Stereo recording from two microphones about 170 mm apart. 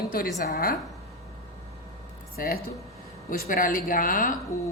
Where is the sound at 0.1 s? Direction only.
60° left (ahead or behind).